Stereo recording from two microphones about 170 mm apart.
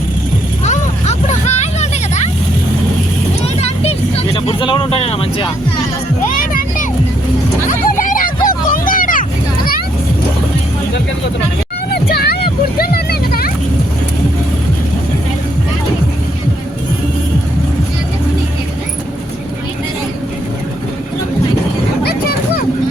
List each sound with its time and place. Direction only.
0.6 s vehicle: 45° left (ahead or behind)
3.6 s vehicle: 35° left (ahead or behind)
6.3 s music: 55° left (ahead or behind)
7.7 s hubbub: 50° left (ahead or behind)
11.9 s music: 65° left (ahead or behind)
12.8 s a sound: 65° left (ahead or behind)
22.0 s a sound: 65° left (ahead or behind)